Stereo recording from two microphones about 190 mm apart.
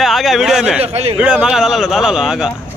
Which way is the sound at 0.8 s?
35° right (ahead or behind).